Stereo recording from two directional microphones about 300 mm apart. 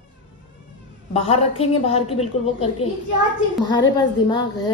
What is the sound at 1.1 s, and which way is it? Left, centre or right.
A woman's voice, centre.